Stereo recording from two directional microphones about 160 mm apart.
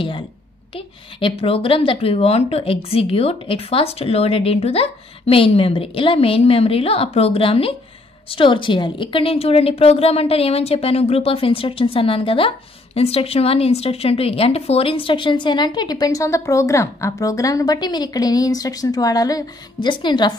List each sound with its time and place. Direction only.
0.7 s a woman's voice: 35° left (ahead or behind)